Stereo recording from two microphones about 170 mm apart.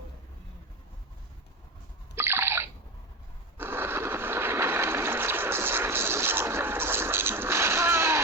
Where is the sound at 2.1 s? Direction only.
15° right (ahead or behind).